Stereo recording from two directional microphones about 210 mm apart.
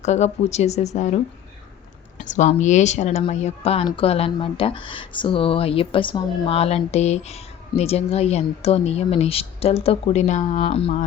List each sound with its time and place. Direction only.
0.0 s speech: 30° left (ahead or behind)
2.2 s speech: 35° left (ahead or behind)